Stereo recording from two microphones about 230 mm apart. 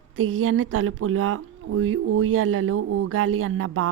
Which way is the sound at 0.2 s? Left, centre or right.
Right.